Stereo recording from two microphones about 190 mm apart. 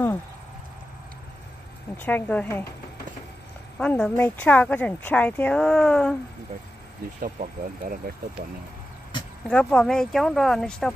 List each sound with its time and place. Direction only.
2.0 s speech: 10° left (ahead or behind)
3.8 s speech: 5° left (ahead or behind)
7.2 s speech: 45° right (ahead or behind)
9.5 s speech: 5° left (ahead or behind)